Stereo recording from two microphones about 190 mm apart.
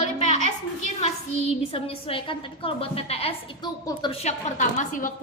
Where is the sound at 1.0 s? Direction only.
35° left (ahead or behind).